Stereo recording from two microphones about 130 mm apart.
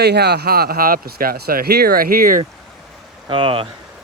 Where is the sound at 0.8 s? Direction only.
90° right.